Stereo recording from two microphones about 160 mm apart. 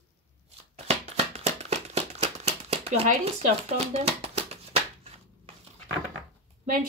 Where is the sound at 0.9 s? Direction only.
45° right (ahead or behind).